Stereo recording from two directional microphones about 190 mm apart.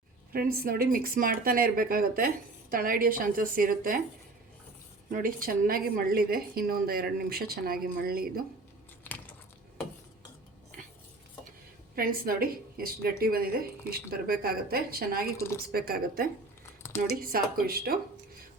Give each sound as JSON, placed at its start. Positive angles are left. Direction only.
{"t": 0.3, "sound": "speech", "side_deg": -50}
{"t": 5.1, "sound": "speech", "side_deg": -45}
{"t": 9.0, "sound": "biting", "side_deg": 10}
{"t": 11.9, "sound": "speech", "side_deg": -50}